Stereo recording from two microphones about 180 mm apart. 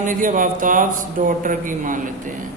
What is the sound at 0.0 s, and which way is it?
A man's voice, 45° right (ahead or behind).